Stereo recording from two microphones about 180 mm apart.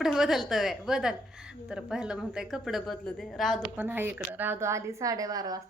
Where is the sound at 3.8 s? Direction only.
10° right (ahead or behind).